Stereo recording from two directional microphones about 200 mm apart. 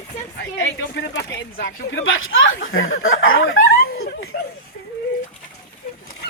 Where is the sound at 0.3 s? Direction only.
65° left (ahead or behind).